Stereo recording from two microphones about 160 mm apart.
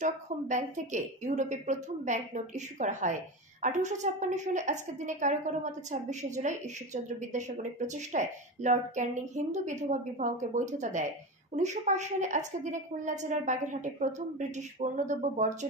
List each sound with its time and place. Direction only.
0.0 s a woman's voice: 50° right (ahead or behind)